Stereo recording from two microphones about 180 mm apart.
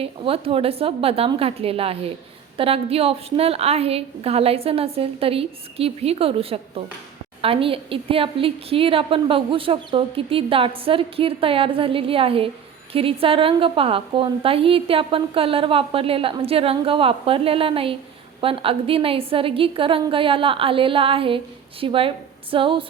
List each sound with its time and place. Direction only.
0.0 s a woman's voice: 30° right (ahead or behind)